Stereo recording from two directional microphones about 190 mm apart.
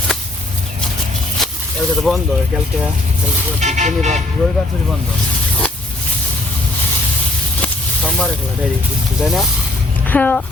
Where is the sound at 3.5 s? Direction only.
40° right (ahead or behind).